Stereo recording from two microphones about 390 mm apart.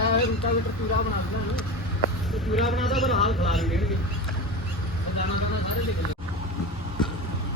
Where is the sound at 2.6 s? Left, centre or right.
Centre.